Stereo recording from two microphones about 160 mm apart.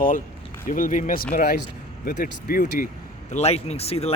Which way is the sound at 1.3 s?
70° left (ahead or behind).